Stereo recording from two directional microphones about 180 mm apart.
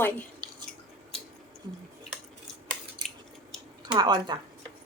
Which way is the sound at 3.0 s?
25° right (ahead or behind).